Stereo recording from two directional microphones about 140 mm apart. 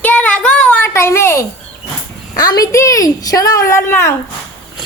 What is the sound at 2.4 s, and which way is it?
A woman's voice, 25° left (ahead or behind).